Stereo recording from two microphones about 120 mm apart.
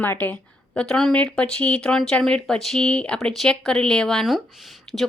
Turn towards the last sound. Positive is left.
turn(degrees=0)  # may be behind; listen again after turning